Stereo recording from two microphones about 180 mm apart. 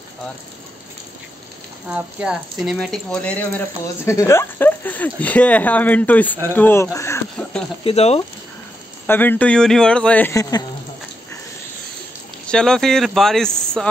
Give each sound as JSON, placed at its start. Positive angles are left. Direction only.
{"t": 1.9, "sound": "speech", "side_deg": -5}
{"t": 7.8, "sound": "speech", "side_deg": 35}
{"t": 9.0, "sound": "speech", "side_deg": 10}
{"t": 12.4, "sound": "speech", "side_deg": 5}